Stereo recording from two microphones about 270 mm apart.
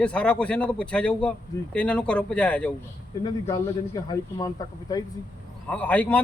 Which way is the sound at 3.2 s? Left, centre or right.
Centre.